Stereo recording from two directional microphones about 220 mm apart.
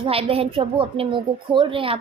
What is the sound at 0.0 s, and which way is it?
A woman's voice, 25° right (ahead or behind).